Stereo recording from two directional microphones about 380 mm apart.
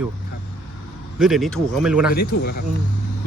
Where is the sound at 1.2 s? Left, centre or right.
Centre.